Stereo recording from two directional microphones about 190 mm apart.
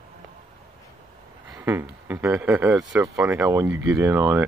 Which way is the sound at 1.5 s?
5° right (ahead or behind).